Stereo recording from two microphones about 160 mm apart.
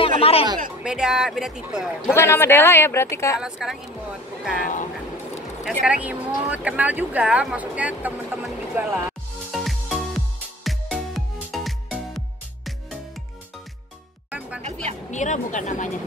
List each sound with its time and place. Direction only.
0.2 s speech: 35° left (ahead or behind)
0.8 s speech: 5° right (ahead or behind)
2.1 s speech: 15° left (ahead or behind)
3.3 s speech: 5° right (ahead or behind)
5.6 s speech: 5° right (ahead or behind)
9.5 s music: centre (ahead or behind)
14.6 s a sound: 45° right (ahead or behind)
15.0 s speech: 50° left (ahead or behind)